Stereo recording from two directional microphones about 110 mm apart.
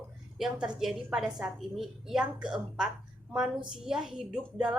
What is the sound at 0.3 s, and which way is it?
A woman's voice, 5° right (ahead or behind).